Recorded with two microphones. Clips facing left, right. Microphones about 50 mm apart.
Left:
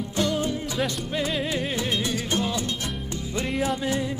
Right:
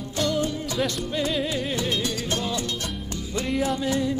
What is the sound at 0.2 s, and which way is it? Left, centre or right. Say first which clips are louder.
Music: even; left.